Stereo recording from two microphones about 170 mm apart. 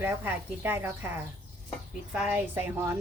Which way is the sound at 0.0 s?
10° right (ahead or behind).